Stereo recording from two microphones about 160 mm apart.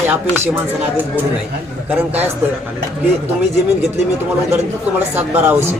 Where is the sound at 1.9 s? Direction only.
10° right (ahead or behind).